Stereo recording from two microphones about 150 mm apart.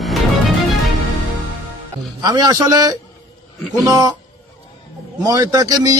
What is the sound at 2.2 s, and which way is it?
A man's voice, 25° right (ahead or behind).